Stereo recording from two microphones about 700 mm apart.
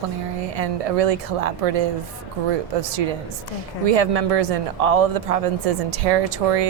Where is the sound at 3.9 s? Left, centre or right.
Right.